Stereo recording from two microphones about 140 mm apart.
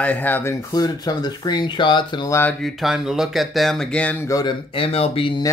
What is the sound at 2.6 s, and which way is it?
Speech, centre (ahead or behind).